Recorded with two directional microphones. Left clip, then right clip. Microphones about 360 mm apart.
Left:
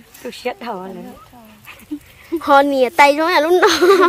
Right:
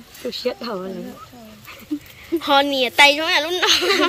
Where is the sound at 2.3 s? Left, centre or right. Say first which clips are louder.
Left 5 dB; centre.